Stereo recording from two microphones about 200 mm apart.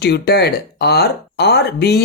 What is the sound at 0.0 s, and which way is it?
Speech, 55° left (ahead or behind).